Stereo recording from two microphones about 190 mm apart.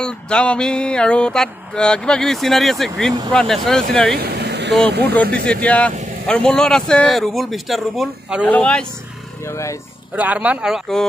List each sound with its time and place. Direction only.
0.0 s mantra: 5° left (ahead or behind)
4.2 s vehicle: 60° right (ahead or behind)
5.1 s speech: 5° left (ahead or behind)
6.2 s mantra: 5° left (ahead or behind)
8.5 s speech: 5° left (ahead or behind)
10.1 s speech: 10° right (ahead or behind)